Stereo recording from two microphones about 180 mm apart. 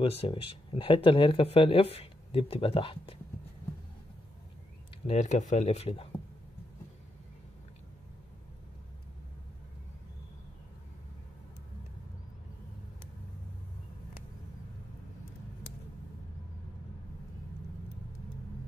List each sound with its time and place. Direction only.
0.0 s speech: 35° left (ahead or behind)
5.0 s speech: 40° left (ahead or behind)